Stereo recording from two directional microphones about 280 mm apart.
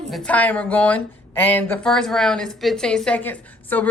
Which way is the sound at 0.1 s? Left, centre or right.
Centre.